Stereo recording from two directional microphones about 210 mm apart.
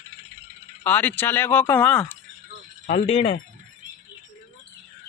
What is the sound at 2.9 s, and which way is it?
Speech, 30° left (ahead or behind).